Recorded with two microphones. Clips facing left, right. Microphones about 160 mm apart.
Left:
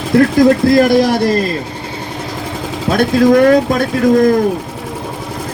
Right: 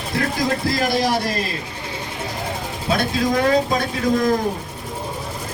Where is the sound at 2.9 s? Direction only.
55° left (ahead or behind).